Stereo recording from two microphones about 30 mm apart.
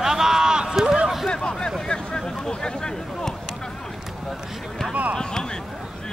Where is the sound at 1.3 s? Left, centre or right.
Left.